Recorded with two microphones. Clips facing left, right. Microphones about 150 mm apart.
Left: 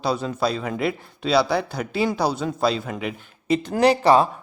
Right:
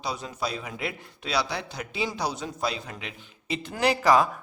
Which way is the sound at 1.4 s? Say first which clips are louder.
Left 10 dB; 55° left (ahead or behind).